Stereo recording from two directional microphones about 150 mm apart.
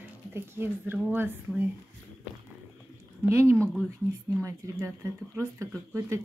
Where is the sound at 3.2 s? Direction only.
15° right (ahead or behind).